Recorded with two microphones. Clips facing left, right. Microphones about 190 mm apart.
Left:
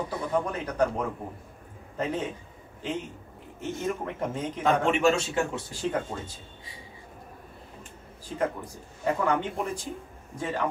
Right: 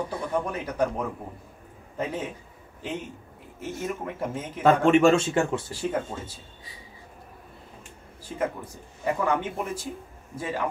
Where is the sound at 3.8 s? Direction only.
5° right (ahead or behind).